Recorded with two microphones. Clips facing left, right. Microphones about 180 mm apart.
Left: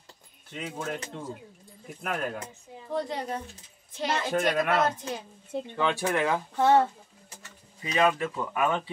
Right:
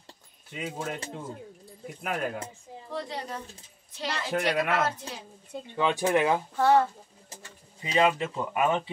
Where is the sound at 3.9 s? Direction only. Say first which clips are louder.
Left 5 dB; 50° left (ahead or behind).